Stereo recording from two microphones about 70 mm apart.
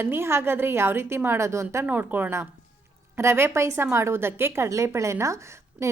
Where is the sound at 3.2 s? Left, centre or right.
Right.